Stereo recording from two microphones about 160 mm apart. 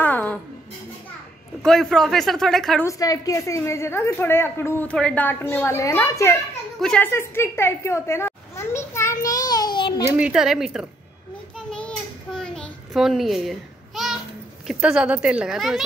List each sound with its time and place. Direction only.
0.0 s music: 10° left (ahead or behind)
1.6 s speech: 5° left (ahead or behind)
2.8 s a woman's voice: 20° left (ahead or behind)
6.8 s speech: 5° left (ahead or behind)
7.1 s a sound: 15° left (ahead or behind)
10.1 s speech: 5° right (ahead or behind)
11.5 s child singing: 5° left (ahead or behind)
12.4 s babbling: 5° left (ahead or behind)
14.7 s speech: 5° right (ahead or behind)